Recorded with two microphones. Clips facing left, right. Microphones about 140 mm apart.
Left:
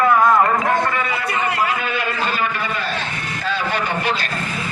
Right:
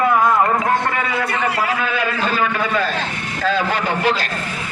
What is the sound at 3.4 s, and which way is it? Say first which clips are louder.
Speech: right 4 dB; 90° right.